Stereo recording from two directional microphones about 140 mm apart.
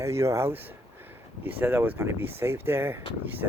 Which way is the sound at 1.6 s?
15° right (ahead or behind).